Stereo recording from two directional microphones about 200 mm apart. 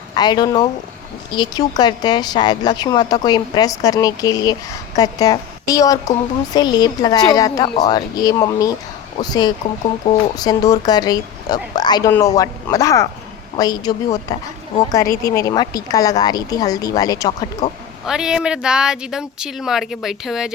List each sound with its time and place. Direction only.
0.2 s a woman's voice: 20° left (ahead or behind)
18.0 s speech: 5° right (ahead or behind)